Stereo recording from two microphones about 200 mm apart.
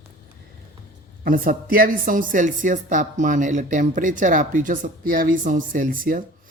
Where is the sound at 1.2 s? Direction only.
45° right (ahead or behind).